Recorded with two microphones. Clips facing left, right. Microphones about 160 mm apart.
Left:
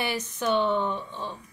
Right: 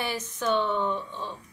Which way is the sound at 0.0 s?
15° left (ahead or behind).